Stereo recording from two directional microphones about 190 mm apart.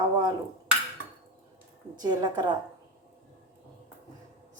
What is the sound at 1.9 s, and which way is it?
Speech, 20° right (ahead or behind).